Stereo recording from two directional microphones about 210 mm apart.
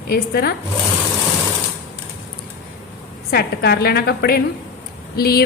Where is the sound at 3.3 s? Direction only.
50° left (ahead or behind).